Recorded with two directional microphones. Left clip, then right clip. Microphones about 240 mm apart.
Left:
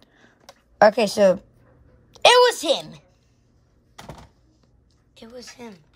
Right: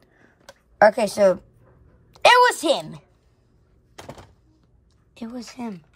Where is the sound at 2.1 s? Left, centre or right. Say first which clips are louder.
Even; centre.